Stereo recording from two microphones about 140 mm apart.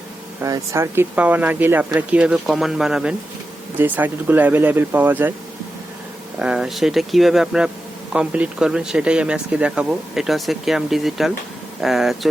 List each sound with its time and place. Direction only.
0.4 s speech: 20° right (ahead or behind)
6.4 s speech: 5° right (ahead or behind)